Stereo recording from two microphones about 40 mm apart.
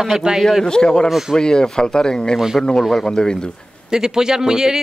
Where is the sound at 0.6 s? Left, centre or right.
Centre.